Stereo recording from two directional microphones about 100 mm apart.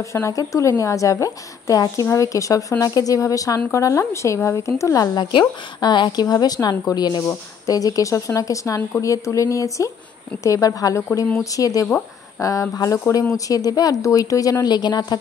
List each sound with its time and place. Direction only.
0.0 s a woman's voice: 30° left (ahead or behind)
5.1 s a woman's voice: 45° left (ahead or behind)